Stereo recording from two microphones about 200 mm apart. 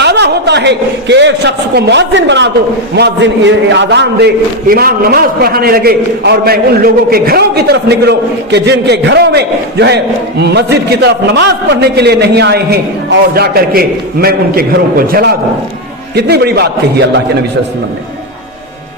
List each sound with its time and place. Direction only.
0.0 s a man's voice: 55° right (ahead or behind)
4.7 s a man's voice: 50° right (ahead or behind)